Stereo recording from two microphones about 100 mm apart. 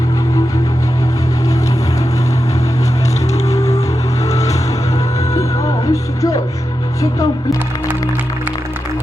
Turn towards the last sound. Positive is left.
turn(degrees=35)  # may be behind; listen again after turning